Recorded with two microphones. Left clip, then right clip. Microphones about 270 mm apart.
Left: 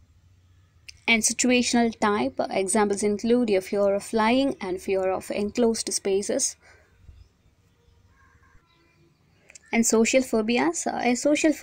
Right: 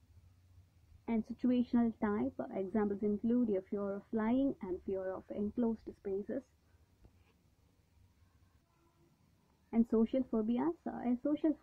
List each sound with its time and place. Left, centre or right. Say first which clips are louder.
1.0 s a woman's voice: left 16 dB; centre
9.7 s a woman's voice: left 12 dB; centre